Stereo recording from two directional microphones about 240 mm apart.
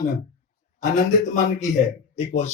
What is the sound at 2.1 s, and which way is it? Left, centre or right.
Speech, left.